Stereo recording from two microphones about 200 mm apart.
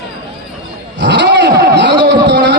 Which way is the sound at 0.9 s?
60° right (ahead or behind).